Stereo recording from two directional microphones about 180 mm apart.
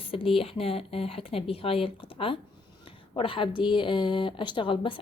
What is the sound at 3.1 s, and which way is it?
A woman's voice, 30° left (ahead or behind).